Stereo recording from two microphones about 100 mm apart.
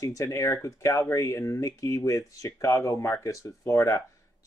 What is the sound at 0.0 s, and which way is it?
Speech, 35° left (ahead or behind).